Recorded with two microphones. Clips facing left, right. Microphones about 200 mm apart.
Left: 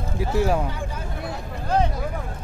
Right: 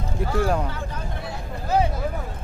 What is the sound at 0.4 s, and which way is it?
Speech, 5° left (ahead or behind).